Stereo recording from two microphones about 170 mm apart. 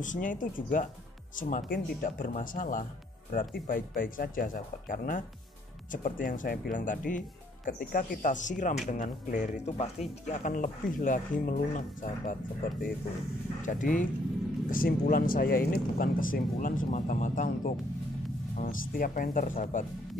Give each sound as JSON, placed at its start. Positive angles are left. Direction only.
{"t": 0.0, "sound": "speech", "side_deg": 50}
{"t": 13.7, "sound": "speech", "side_deg": 50}